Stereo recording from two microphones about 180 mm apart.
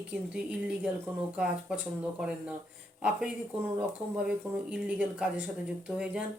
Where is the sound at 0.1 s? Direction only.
5° right (ahead or behind).